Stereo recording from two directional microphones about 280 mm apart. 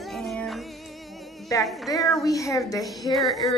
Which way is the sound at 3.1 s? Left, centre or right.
Centre.